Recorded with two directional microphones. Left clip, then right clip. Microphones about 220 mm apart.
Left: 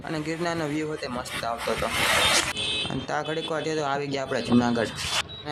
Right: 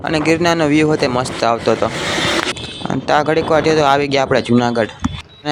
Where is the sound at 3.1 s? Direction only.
40° right (ahead or behind).